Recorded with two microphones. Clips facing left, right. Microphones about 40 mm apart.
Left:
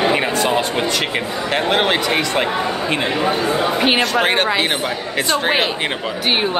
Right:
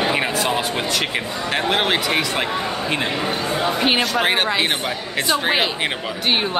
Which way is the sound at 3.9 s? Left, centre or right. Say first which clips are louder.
Left 3 dB; centre.